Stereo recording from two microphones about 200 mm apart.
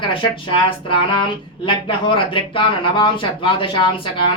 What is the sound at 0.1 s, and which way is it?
Speech, 25° left (ahead or behind).